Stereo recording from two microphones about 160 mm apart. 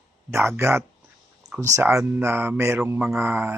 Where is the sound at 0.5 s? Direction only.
15° right (ahead or behind).